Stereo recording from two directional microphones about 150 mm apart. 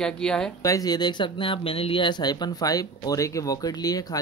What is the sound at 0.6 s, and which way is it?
Speech, 25° left (ahead or behind).